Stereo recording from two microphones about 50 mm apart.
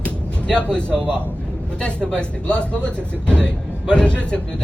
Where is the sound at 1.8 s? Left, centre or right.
Centre.